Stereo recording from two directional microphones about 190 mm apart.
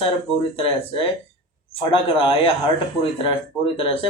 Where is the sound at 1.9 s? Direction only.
30° left (ahead or behind).